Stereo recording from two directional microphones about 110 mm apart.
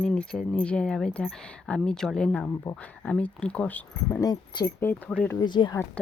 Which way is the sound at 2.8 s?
15° left (ahead or behind).